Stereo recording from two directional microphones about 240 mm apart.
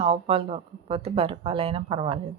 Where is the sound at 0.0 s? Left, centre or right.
Right.